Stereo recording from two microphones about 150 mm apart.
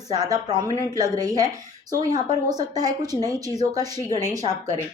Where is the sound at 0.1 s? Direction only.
25° right (ahead or behind).